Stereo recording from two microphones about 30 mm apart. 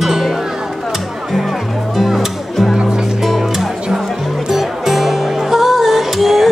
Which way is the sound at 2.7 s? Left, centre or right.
Right.